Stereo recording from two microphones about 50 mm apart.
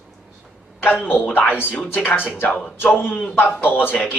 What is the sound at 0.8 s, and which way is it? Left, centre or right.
Speech, left.